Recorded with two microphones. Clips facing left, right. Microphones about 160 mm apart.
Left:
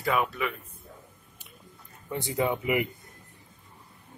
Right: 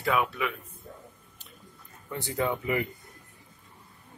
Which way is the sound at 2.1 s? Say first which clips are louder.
Left 2 dB; 15° left (ahead or behind).